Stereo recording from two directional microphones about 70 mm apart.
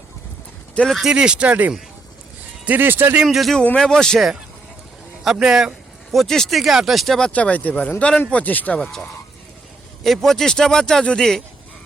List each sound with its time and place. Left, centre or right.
1.0 s speech: centre; by 3.2 s right
3.2 s speech: centre
5.2 s speech: centre
6.1 s speech: centre
7.3 s speech: centre
8.8 s speech: centre